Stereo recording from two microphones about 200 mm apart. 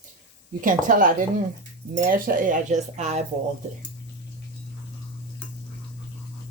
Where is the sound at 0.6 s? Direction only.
45° right (ahead or behind).